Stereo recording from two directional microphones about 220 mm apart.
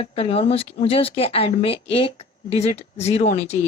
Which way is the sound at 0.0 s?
25° left (ahead or behind).